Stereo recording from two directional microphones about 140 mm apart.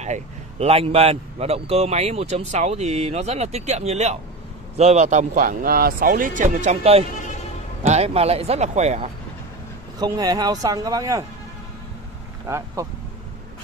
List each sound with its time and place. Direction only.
0.0 s a man's voice: 50° right (ahead or behind)
9.9 s a man's voice: 30° right (ahead or behind)
12.4 s speech: 20° right (ahead or behind)